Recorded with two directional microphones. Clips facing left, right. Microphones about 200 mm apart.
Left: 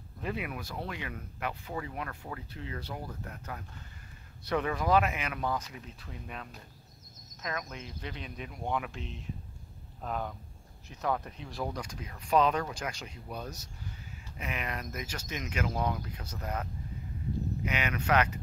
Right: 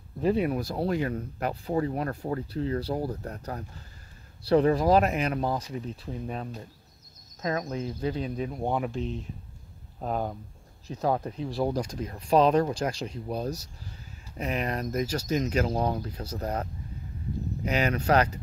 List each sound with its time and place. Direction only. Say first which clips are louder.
0.2 s speech: right 11 dB; 35° right (ahead or behind)
7.6 s speech: right 12 dB; 35° right (ahead or behind)
17.6 s speech: right 7 dB; 35° right (ahead or behind)